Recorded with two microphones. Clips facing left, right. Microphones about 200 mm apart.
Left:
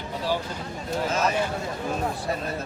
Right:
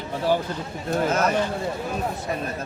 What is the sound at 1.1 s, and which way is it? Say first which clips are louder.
Speech: right 1 dB; 55° right (ahead or behind).